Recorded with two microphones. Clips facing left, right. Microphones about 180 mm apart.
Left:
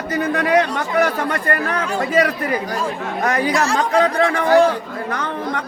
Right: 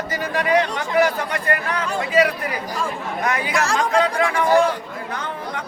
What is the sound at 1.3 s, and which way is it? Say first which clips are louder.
Speech: left 2 dB; 40° left (ahead or behind).